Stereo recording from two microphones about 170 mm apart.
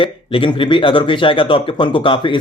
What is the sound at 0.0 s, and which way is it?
Speech, 30° left (ahead or behind).